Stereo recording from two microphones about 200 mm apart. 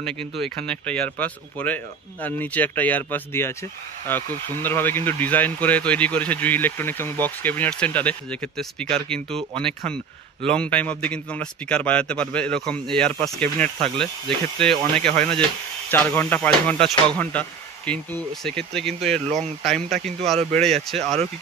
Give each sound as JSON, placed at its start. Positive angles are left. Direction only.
{"t": 0.7, "sound": "speech", "side_deg": 5}
{"t": 19.2, "sound": "speech", "side_deg": -35}
{"t": 19.6, "sound": "speech", "side_deg": 0}